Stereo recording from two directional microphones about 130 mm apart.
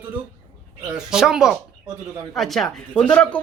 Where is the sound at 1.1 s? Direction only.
5° right (ahead or behind).